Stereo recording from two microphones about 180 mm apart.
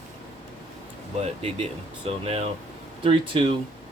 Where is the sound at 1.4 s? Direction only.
35° right (ahead or behind).